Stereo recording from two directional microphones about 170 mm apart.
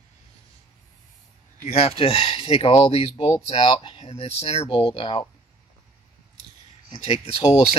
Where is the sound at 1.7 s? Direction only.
35° left (ahead or behind).